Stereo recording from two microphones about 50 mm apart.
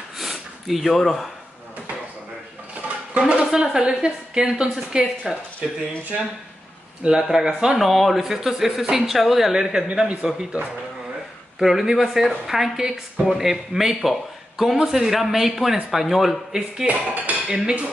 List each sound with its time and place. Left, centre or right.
0.2 s snort: centre
3.2 s speech: centre
7.0 s speech: centre
11.6 s a man's voice: centre
16.8 s speech: right